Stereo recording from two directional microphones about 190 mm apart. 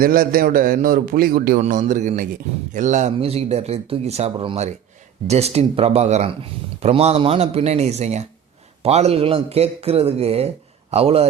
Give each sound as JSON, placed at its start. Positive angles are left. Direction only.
{"t": 0.0, "sound": "a man's voice", "side_deg": -50}